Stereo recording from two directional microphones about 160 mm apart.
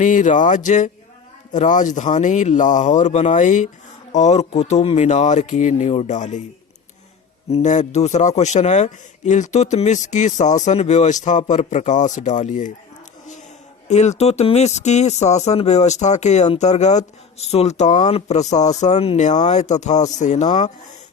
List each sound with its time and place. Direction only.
0.0 s a man's voice: 50° left (ahead or behind)
7.5 s a man's voice: 45° left (ahead or behind)
13.8 s a man's voice: 45° left (ahead or behind)